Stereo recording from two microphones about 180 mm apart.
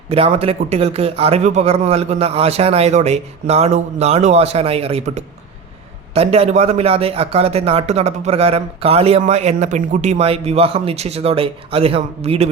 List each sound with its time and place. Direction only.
0.1 s speech: 30° right (ahead or behind)